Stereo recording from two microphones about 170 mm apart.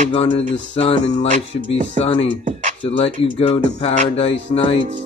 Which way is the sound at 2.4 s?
45° right (ahead or behind).